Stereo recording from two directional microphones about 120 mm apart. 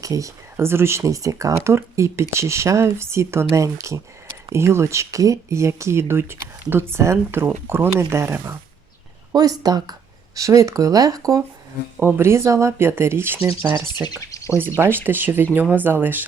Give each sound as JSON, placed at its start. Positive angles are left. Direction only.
{"t": 0.0, "sound": "speech", "side_deg": -25}
{"t": 11.9, "sound": "speech", "side_deg": -15}
{"t": 13.9, "sound": "speech", "side_deg": 35}
{"t": 14.8, "sound": "speech", "side_deg": -20}